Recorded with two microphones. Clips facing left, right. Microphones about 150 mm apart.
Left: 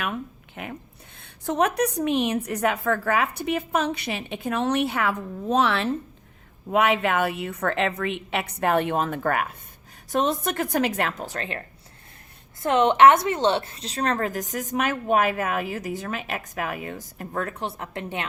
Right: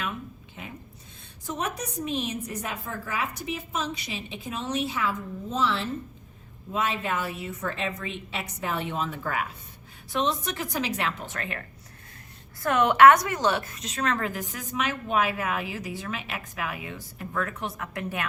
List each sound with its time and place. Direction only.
0.0 s a sound: 60° left (ahead or behind)
1.2 s a woman's voice: 65° left (ahead or behind); by 11.6 s 30° left (ahead or behind)
12.6 s a woman's voice: 25° left (ahead or behind)